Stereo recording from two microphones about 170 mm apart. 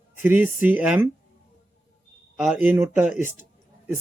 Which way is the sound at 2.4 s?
10° right (ahead or behind).